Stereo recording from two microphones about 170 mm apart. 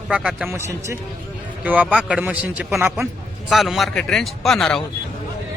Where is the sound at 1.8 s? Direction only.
5° left (ahead or behind).